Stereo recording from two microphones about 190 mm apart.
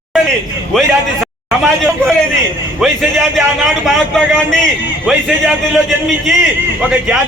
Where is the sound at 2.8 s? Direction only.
Centre (ahead or behind).